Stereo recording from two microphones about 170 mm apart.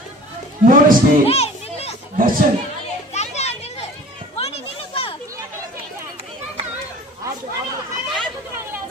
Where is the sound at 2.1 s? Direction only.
55° right (ahead or behind).